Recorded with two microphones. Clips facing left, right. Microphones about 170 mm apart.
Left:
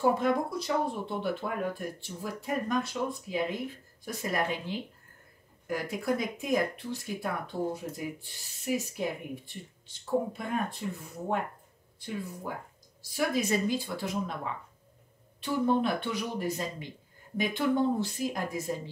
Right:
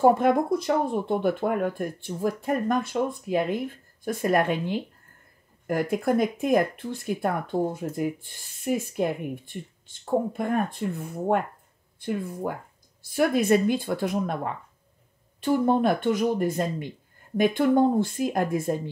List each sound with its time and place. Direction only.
0.0 s speech: 50° right (ahead or behind)